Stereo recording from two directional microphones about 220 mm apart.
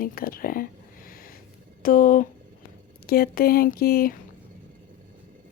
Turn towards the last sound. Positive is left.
turn(degrees=45)  # may be behind; listen again after turning